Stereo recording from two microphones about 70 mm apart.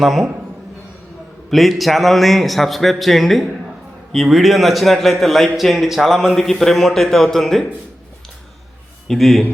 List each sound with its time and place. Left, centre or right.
0.0 s a man's voice: centre
1.5 s a man's voice: centre
9.0 s a man's voice: centre